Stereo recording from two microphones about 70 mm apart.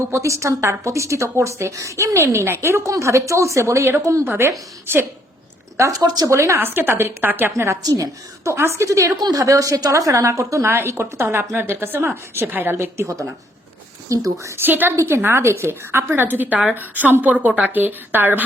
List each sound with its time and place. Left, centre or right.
0.1 s a woman's voice: right
5.9 s a woman's voice: right
6.3 s a woman's voice: right
6.7 s a woman's voice: right
7.5 s a woman's voice: right
7.8 s a woman's voice: right
8.5 s a woman's voice: right
14.1 s a woman's voice: right
14.6 s a woman's voice: right